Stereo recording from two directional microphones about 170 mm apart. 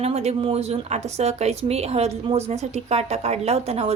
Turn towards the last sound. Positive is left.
turn(degrees=-35)  # may be behind; listen again after turning